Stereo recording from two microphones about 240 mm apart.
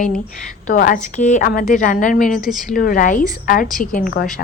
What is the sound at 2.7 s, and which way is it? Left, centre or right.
A woman's voice, left.